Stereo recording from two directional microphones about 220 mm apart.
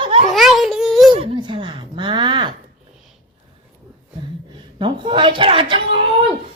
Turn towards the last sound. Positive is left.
turn(degrees=-25)  # may be behind; listen again after turning